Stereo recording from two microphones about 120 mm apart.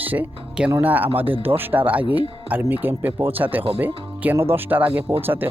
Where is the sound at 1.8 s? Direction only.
15° right (ahead or behind).